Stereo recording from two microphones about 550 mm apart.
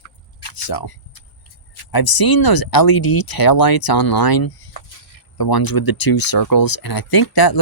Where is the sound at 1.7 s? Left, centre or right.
Left.